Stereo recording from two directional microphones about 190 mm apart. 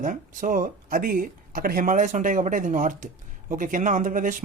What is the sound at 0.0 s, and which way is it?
Speech, 45° right (ahead or behind).